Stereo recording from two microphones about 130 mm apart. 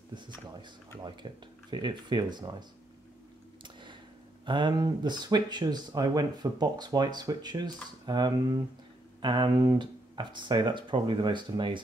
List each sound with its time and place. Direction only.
1.2 s speech: 40° right (ahead or behind)
3.6 s a sound: 35° right (ahead or behind)
4.5 s speech: 35° right (ahead or behind)